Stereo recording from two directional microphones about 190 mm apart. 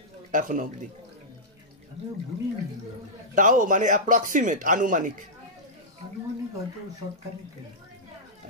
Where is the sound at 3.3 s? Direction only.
40° right (ahead or behind).